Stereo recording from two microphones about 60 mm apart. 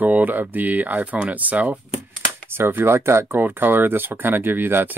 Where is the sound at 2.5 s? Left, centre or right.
Right.